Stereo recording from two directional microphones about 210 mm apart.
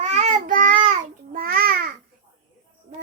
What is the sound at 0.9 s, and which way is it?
Babbling, 40° right (ahead or behind).